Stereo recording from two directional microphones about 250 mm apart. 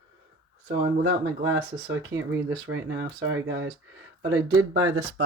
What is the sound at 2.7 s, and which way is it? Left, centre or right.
Speech, right.